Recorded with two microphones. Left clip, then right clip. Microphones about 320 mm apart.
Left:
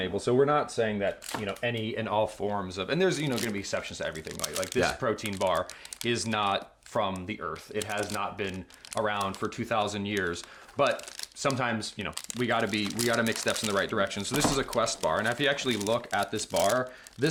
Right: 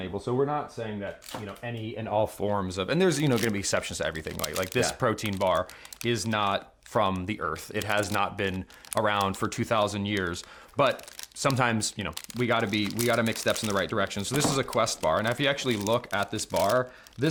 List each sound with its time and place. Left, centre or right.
0.0 s speech: centre
2.4 s speech: right
9.7 s speech: right